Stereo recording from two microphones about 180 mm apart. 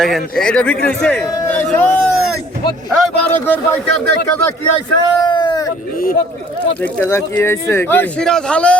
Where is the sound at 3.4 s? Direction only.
10° left (ahead or behind).